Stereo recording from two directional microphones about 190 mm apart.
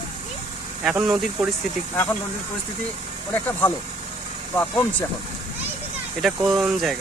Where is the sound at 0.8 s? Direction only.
Centre (ahead or behind).